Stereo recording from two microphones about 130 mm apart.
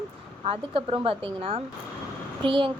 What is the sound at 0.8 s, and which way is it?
Speech, 45° right (ahead or behind).